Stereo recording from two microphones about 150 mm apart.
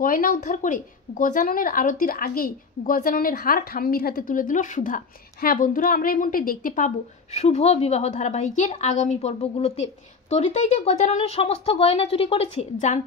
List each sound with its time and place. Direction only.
0.0 s speech: 70° left (ahead or behind)
7.3 s speech: 45° left (ahead or behind)